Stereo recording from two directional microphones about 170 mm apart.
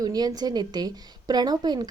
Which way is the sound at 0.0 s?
20° right (ahead or behind).